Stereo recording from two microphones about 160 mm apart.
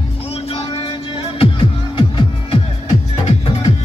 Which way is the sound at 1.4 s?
30° left (ahead or behind).